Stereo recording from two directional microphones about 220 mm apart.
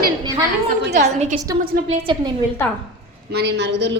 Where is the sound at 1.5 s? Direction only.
20° right (ahead or behind).